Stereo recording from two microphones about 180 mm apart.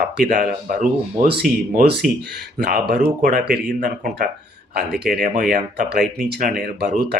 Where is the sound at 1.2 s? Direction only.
60° right (ahead or behind).